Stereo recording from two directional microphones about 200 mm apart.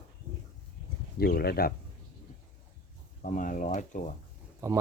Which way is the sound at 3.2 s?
40° left (ahead or behind).